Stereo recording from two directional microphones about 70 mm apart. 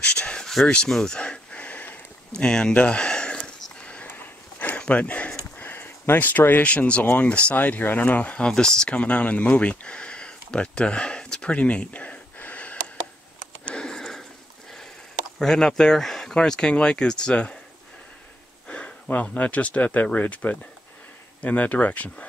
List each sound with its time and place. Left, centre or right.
0.0 s speech: centre
0.7 s a sound: centre
5.6 s speech: left
13.7 s sniff: centre
15.3 s speech: centre
18.7 s speech: left